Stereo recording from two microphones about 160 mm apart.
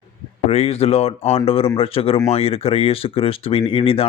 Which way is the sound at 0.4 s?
40° left (ahead or behind).